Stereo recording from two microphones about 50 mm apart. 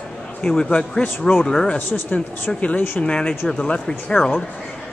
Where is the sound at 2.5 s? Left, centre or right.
Left.